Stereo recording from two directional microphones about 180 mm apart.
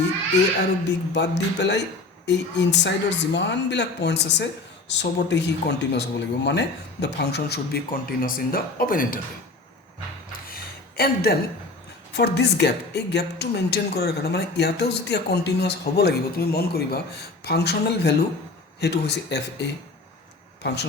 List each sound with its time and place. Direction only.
1.1 s speech: 75° left (ahead or behind); by 9.1 s 50° left (ahead or behind)
10.5 s a sound: 60° left (ahead or behind)
12.1 s a woman's voice: 70° left (ahead or behind)